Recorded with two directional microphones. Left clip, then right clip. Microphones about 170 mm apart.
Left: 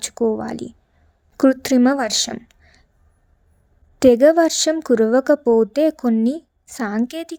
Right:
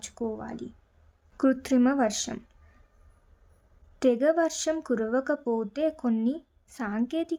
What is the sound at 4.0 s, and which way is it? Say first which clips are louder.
A woman's voice: left 11 dB; 40° left (ahead or behind).